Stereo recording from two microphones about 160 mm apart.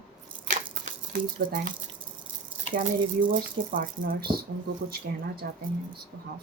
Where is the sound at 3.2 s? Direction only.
55° right (ahead or behind).